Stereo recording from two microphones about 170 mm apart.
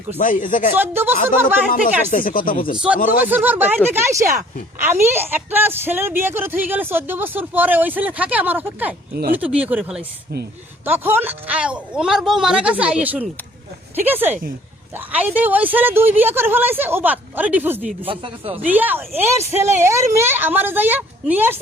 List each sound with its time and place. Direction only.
0.2 s speech: 55° left (ahead or behind)
0.8 s speech: 10° right (ahead or behind)
2.0 s speech: 55° left (ahead or behind)
2.7 s speech: 5° right (ahead or behind)
3.0 s speech: 55° left (ahead or behind)
3.2 s speech: 10° right (ahead or behind)
18.0 s speech: 30° right (ahead or behind)
18.6 s speech: 10° right (ahead or behind)